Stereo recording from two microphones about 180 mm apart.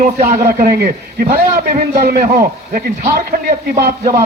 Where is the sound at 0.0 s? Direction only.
55° right (ahead or behind).